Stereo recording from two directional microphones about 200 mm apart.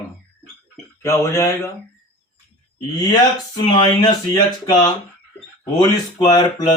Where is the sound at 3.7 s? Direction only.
20° left (ahead or behind).